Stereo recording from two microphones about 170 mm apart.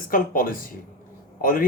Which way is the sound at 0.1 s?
55° left (ahead or behind).